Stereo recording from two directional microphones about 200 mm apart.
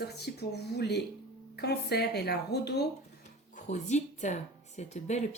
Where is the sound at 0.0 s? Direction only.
55° left (ahead or behind).